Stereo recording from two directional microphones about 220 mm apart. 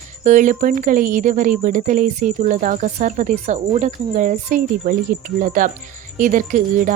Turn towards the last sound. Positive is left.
turn(degrees=-35)  # may be behind; listen again after turning